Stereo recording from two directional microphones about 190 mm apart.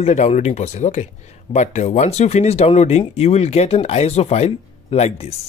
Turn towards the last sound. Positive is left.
turn(degrees=35)  # may be behind; listen again after turning